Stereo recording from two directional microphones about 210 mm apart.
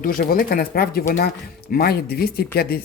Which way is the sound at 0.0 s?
40° left (ahead or behind).